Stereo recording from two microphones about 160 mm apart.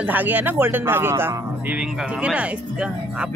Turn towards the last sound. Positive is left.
turn(degrees=-10)  # may be behind; listen again after turning